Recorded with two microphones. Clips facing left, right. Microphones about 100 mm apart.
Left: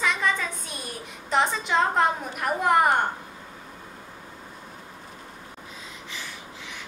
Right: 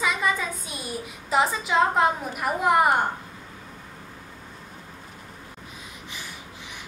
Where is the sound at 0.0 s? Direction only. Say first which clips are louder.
Right 1 dB; 5° right (ahead or behind).